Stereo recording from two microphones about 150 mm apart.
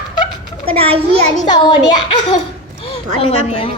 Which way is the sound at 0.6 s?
40° right (ahead or behind).